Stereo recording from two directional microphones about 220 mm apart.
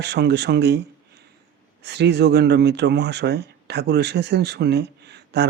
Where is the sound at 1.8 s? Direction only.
50° right (ahead or behind).